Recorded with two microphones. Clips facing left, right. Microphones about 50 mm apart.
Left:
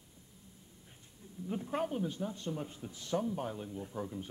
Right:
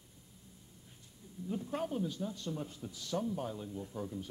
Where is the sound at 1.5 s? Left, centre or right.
Left.